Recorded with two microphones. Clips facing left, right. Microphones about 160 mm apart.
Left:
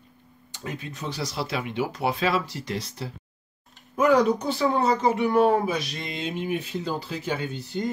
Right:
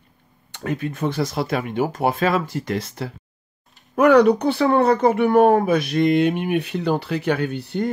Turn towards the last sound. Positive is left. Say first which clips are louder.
# right 6 dB
turn(degrees=-60)  # may be behind; listen again after turning